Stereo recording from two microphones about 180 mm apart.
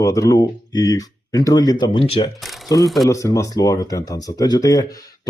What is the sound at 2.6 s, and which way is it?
Speech, 20° left (ahead or behind).